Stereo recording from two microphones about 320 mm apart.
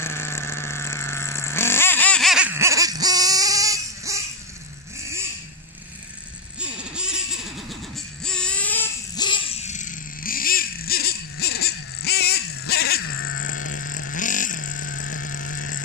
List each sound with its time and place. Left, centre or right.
0.0 s vehicle: centre
6.6 s a sound: centre
8.2 s baby cry: centre; by 13.4 s left
13.4 s vehicle: left